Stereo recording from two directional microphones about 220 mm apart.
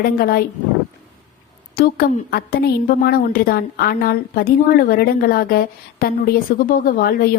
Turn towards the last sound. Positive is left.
turn(degrees=45)  # may be behind; listen again after turning